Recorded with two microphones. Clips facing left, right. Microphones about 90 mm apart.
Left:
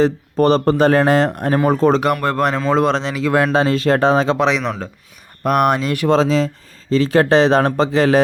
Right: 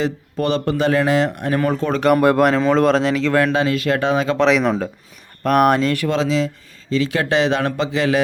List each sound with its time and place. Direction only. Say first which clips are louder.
0.0 s speech: left 6 dB; 40° left (ahead or behind)
2.2 s speech: right 3 dB; 10° right (ahead or behind)
3.4 s speech: left 2 dB; 35° left (ahead or behind)
4.4 s speech: right 2 dB; centre (ahead or behind)
5.8 s speech: right 1 dB; 15° left (ahead or behind)
6.1 s speech: left 4 dB; 40° left (ahead or behind)